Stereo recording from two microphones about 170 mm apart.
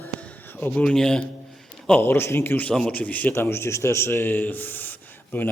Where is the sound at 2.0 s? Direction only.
15° left (ahead or behind).